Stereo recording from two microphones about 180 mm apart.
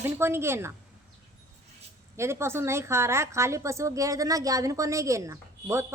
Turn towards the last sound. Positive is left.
turn(degrees=-15)  # may be behind; listen again after turning